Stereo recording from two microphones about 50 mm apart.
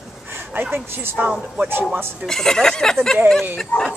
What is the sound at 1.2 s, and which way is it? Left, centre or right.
Speech, right.